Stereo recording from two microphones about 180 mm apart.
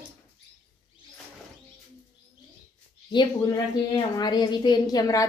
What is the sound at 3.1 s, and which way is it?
A woman's voice, 25° left (ahead or behind).